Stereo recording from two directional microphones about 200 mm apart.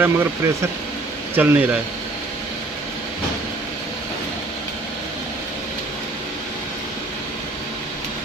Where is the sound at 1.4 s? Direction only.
10° right (ahead or behind).